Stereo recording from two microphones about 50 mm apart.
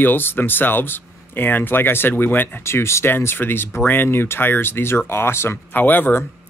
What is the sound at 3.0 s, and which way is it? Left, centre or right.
Speech, left.